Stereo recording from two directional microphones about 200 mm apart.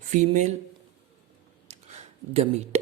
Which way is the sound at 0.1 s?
35° right (ahead or behind).